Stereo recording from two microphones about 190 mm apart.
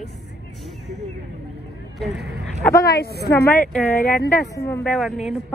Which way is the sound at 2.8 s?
55° left (ahead or behind).